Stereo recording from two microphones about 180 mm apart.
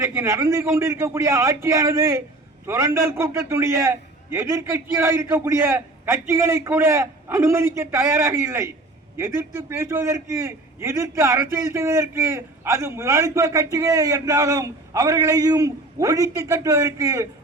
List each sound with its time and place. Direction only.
0.0 s a man's voice: 15° right (ahead or behind)